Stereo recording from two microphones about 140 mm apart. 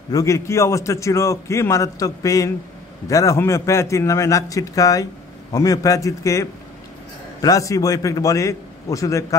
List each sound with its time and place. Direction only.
0.1 s a man's voice: 20° left (ahead or behind)